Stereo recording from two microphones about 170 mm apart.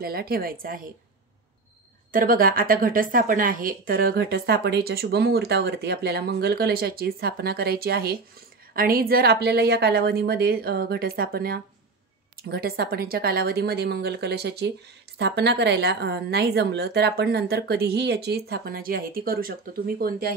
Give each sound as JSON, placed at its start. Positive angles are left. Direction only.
{"t": 0.0, "sound": "speech", "side_deg": -65}
{"t": 2.1, "sound": "a woman's voice", "side_deg": -55}